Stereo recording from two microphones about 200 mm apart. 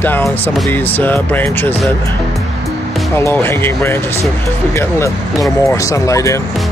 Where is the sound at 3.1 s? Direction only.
10° left (ahead or behind).